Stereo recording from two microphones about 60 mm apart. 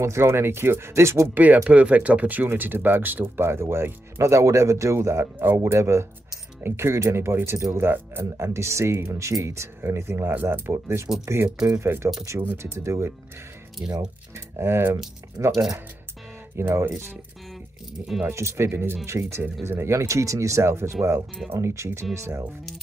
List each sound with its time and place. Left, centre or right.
0.0 s speech: right
1.3 s speech: right
3.4 s speech: right
10.3 s speech: right
12.4 s speech: right
12.7 s speech: right
14.3 s speech: right
15.4 s speech: right
16.5 s speech: right
18.3 s speech: right